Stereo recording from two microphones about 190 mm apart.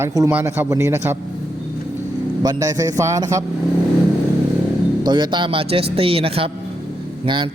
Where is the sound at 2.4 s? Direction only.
20° right (ahead or behind).